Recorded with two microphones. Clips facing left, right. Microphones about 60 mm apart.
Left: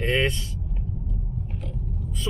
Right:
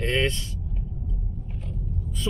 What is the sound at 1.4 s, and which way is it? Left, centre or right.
Vehicle, left.